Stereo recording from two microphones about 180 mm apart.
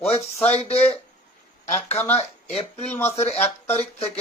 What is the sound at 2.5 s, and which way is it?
Speech, 35° left (ahead or behind).